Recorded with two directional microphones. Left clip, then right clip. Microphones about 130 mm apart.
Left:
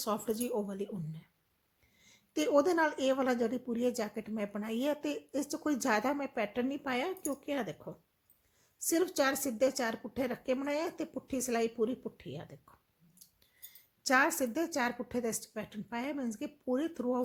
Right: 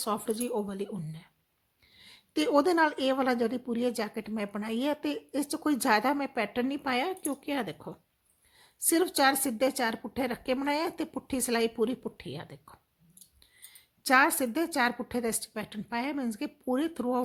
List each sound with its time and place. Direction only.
0.0 s a woman's voice: 15° right (ahead or behind)
14.0 s a woman's voice: 25° right (ahead or behind)